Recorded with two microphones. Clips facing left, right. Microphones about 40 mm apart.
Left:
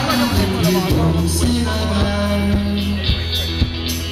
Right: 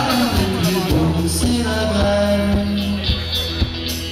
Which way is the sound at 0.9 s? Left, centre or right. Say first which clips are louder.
Even; left.